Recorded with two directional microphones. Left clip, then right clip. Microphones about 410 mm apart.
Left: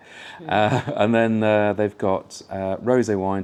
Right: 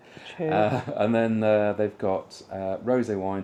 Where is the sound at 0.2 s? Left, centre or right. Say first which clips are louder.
Left 3 dB; left.